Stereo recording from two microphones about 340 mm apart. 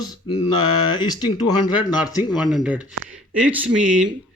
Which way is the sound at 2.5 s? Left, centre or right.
Centre.